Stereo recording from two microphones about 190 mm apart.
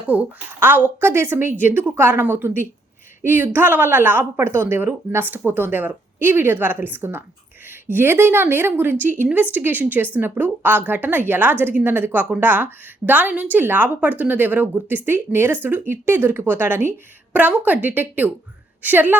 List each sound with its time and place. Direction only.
0.1 s speech: 10° right (ahead or behind)